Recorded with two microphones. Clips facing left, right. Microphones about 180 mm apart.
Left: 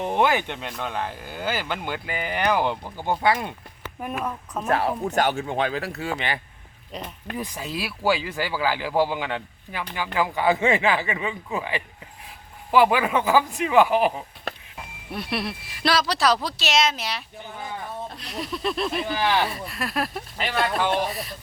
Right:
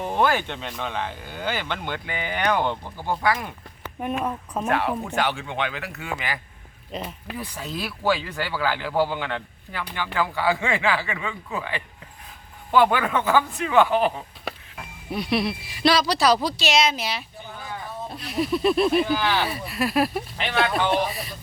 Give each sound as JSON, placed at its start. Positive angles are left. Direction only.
{"t": 0.0, "sound": "speech", "side_deg": 20}
{"t": 3.0, "sound": "speech", "side_deg": 25}
{"t": 4.7, "sound": "speech", "side_deg": 35}
{"t": 6.9, "sound": "speech", "side_deg": -5}
{"t": 7.3, "sound": "a man's voice", "side_deg": 15}
{"t": 15.1, "sound": "speech", "side_deg": 0}
{"t": 19.2, "sound": "a man's voice", "side_deg": 15}
{"t": 19.5, "sound": "speech", "side_deg": -5}